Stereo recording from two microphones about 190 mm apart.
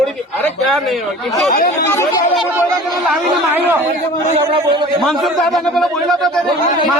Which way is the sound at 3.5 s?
10° right (ahead or behind).